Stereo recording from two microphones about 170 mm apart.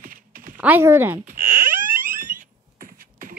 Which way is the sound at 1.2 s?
55° right (ahead or behind).